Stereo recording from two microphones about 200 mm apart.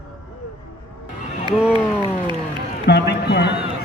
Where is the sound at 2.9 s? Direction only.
55° left (ahead or behind).